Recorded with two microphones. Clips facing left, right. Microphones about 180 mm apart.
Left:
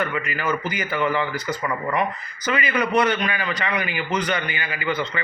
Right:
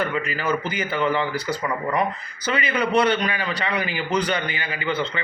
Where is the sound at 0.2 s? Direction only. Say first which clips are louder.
Right 1 dB; 30° right (ahead or behind).